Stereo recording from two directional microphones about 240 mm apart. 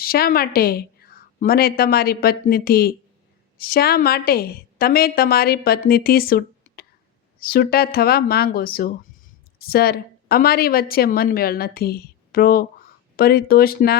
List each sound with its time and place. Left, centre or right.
0.0 s a woman's voice: left